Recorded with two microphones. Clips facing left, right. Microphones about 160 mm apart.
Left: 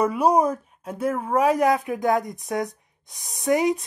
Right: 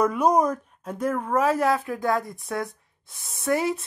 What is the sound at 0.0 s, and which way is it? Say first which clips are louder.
Speech: left 1 dB; 10° left (ahead or behind).